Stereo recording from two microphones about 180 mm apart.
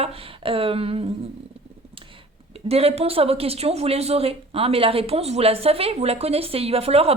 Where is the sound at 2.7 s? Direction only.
35° right (ahead or behind).